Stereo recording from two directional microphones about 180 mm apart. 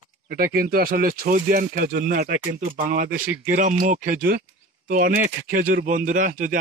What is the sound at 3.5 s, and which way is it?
Speech, 45° right (ahead or behind).